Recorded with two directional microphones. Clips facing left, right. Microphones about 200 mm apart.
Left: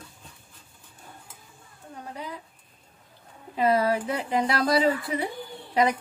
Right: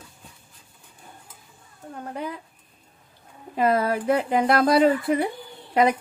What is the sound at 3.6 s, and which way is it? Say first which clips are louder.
Speech: right 1 dB; 50° right (ahead or behind).